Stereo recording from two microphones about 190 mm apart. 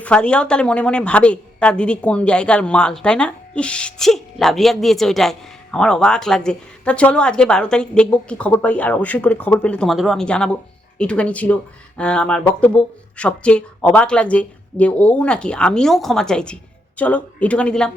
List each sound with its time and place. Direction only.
0.0 s a woman's voice: 5° left (ahead or behind)